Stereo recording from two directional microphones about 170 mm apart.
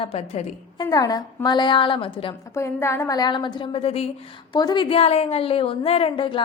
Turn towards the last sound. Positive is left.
turn(degrees=30)  # may be behind; listen again after turning